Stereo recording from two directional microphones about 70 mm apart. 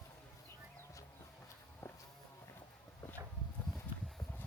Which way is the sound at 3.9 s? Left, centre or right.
Left.